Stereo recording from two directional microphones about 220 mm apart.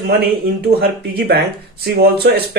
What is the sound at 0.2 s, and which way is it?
Speech, 45° right (ahead or behind).